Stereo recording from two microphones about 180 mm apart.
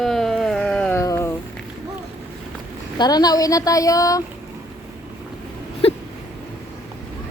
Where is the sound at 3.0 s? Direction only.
20° left (ahead or behind).